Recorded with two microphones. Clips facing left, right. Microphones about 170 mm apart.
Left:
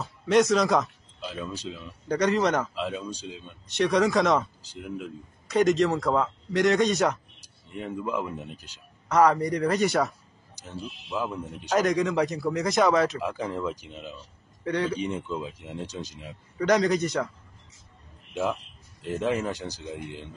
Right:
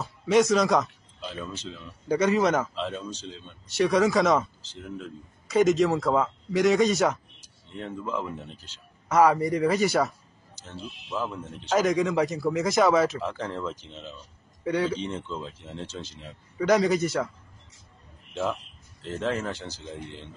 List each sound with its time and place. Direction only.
0.0 s a man's voice: centre (ahead or behind)
3.7 s a man's voice: centre (ahead or behind)
4.7 s speech: 10° left (ahead or behind)
5.5 s a man's voice: centre (ahead or behind)
7.7 s speech: 10° left (ahead or behind)
9.1 s a man's voice: 5° right (ahead or behind)
10.5 s speech: 15° left (ahead or behind)
11.7 s a man's voice: centre (ahead or behind)
13.2 s speech: 10° left (ahead or behind)
14.6 s speech: 5° right (ahead or behind)
14.9 s speech: 15° left (ahead or behind)
16.5 s a man's voice: centre (ahead or behind)
18.4 s speech: 10° left (ahead or behind)